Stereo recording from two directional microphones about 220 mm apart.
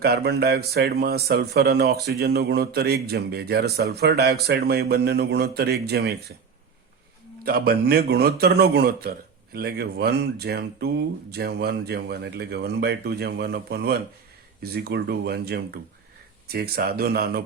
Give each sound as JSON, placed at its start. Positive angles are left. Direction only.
{"t": 0.0, "sound": "a man's voice", "side_deg": -45}
{"t": 7.4, "sound": "a man's voice", "side_deg": -45}